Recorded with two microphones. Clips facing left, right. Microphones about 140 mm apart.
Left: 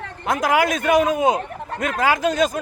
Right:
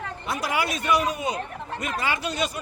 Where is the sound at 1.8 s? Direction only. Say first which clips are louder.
Left 8 dB; 90° left.